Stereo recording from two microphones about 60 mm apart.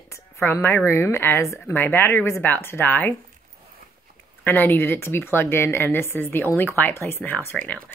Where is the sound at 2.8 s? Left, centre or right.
Left.